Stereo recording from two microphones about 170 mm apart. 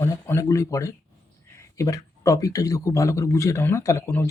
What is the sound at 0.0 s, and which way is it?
Speech, 15° left (ahead or behind).